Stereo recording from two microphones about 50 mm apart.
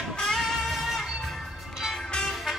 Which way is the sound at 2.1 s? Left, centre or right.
Centre.